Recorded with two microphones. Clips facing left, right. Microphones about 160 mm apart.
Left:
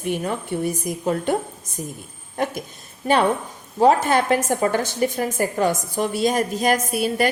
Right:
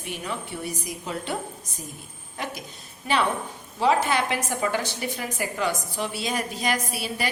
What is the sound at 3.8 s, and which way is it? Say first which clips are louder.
A woman's voice: left 6 dB; 45° left (ahead or behind).